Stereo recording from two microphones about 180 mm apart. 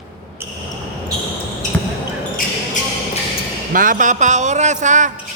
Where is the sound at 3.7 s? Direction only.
50° right (ahead or behind).